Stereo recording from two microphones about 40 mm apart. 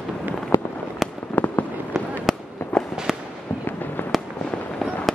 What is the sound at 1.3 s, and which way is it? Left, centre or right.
Fireworks, left.